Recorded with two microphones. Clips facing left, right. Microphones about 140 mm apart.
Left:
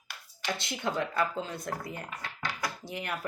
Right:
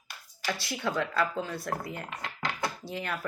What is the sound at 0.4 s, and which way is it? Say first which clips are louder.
Speech: right 1 dB; 20° left (ahead or behind).